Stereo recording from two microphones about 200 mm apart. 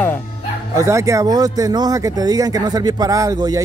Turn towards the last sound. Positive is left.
turn(degrees=-15)  # may be behind; listen again after turning